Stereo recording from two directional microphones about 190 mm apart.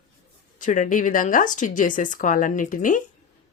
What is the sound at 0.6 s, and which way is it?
Speech, 45° left (ahead or behind).